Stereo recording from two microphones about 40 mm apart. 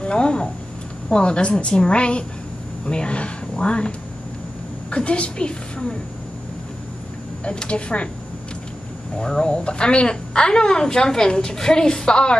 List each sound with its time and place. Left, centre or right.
0.0 s a woman's voice: left
4.9 s a woman's voice: left
7.4 s a woman's voice: left
9.2 s a woman's voice: left